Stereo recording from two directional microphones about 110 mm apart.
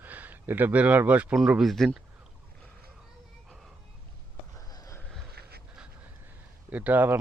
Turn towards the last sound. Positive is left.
turn(degrees=-15)  # may be behind; listen again after turning